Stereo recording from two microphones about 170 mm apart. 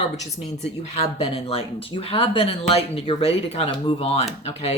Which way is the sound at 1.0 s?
35° left (ahead or behind).